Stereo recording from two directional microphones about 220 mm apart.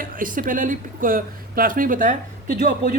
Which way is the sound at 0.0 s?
40° right (ahead or behind).